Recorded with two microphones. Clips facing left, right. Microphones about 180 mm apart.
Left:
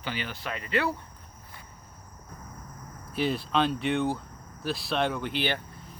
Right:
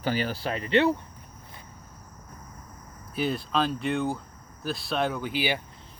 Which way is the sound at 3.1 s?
Centre (ahead or behind).